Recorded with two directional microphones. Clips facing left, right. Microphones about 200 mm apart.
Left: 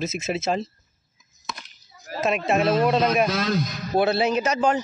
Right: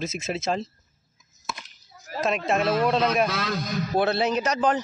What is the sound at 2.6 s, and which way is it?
Speech, 25° left (ahead or behind).